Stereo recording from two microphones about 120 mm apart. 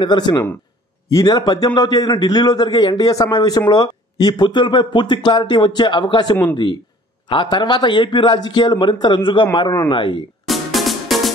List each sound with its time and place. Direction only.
0.0 s a man's voice: 40° left (ahead or behind)
10.4 s music: centre (ahead or behind)